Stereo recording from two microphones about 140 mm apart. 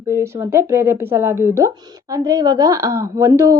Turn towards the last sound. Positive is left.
turn(degrees=-20)  # may be behind; listen again after turning